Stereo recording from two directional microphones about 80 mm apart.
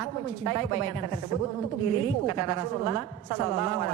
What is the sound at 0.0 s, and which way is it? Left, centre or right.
A woman's voice, right.